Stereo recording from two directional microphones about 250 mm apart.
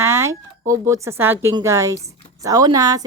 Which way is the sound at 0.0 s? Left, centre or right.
Centre.